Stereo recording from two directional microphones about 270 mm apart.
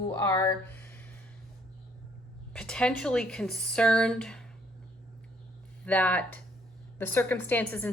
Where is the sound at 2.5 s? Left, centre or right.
Centre.